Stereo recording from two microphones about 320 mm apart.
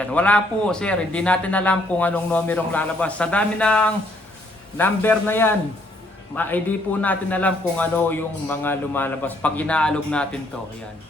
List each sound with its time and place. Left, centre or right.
0.0 s a man's voice: centre